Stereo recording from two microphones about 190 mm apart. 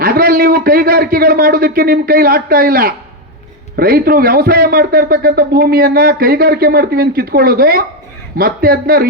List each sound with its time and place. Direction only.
0.0 s a man's voice: 50° right (ahead or behind)